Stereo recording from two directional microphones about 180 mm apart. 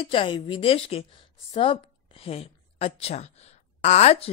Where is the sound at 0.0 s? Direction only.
30° left (ahead or behind).